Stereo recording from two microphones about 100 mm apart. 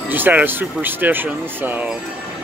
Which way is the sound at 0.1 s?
20° right (ahead or behind).